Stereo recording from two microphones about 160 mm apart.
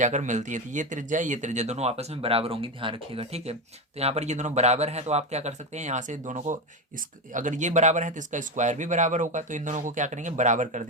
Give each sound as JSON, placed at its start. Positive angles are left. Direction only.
{"t": 0.0, "sound": "speech", "side_deg": -50}